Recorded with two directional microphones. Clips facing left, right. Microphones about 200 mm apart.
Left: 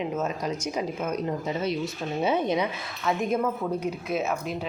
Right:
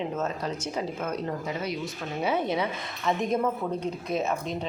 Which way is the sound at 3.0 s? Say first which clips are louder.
Even; centre (ahead or behind).